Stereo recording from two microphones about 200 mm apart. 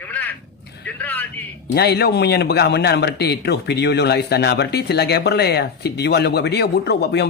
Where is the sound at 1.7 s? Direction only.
55° left (ahead or behind).